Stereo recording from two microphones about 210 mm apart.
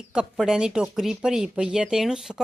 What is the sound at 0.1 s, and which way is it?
Speech, 5° right (ahead or behind).